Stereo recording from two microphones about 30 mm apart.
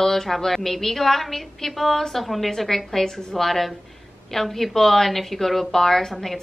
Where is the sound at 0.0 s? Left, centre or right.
Centre.